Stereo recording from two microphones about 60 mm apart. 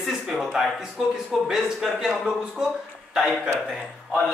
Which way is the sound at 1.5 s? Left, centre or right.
Centre.